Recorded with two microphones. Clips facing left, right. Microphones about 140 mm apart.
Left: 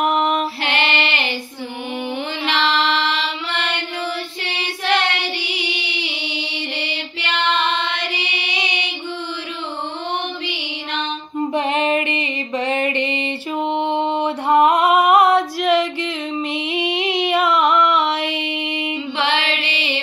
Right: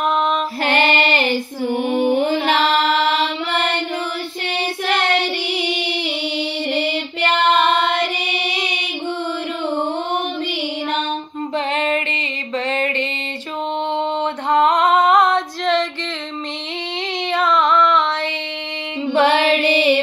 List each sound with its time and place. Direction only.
0.0 s female singing: 10° left (ahead or behind)
0.7 s female singing: 45° right (ahead or behind)
2.0 s mantra: 45° right (ahead or behind)
4.8 s child singing: 45° right (ahead or behind)
6.7 s music: 50° right (ahead or behind)
11.5 s music: 15° left (ahead or behind)
14.2 s female singing: 10° left (ahead or behind)
16.8 s a sound: 10° left (ahead or behind)
19.1 s mantra: 45° right (ahead or behind)